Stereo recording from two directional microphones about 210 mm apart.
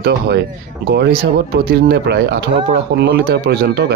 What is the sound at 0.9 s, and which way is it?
Speech, 50° right (ahead or behind).